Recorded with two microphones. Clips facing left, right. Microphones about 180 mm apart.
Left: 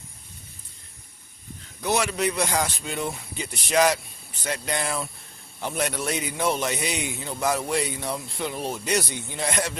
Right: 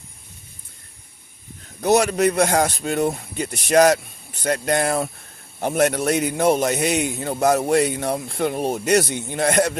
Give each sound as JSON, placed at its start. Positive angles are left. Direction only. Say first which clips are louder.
{"t": 1.8, "sound": "a man's voice", "louder": "right 8 dB", "side_deg": -45}